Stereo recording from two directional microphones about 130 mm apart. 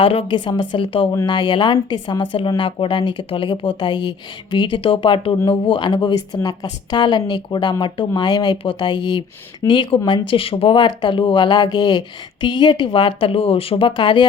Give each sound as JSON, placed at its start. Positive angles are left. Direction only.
{"t": 0.0, "sound": "speech", "side_deg": 45}